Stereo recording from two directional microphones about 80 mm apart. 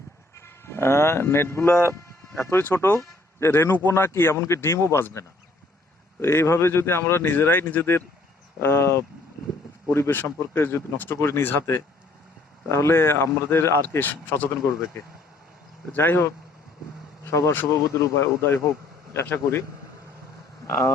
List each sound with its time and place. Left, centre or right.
0.3 s speech: left
12.6 s speech: left
15.9 s speech: left
17.2 s speech: left
17.5 s speech: left